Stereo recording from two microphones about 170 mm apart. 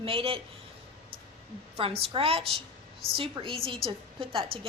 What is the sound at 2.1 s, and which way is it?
Speech, 35° right (ahead or behind).